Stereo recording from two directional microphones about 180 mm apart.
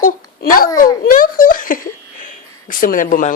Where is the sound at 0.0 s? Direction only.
50° left (ahead or behind).